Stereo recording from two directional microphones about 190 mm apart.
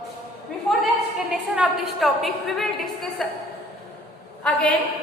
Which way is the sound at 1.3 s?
5° right (ahead or behind).